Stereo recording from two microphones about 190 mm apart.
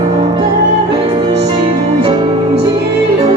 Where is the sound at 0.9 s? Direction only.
30° right (ahead or behind).